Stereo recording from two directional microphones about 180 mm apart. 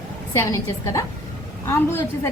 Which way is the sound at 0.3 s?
15° left (ahead or behind).